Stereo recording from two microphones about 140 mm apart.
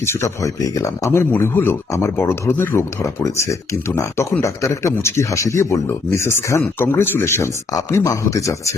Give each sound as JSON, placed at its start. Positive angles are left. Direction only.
{"t": 0.0, "sound": "speech", "side_deg": 20}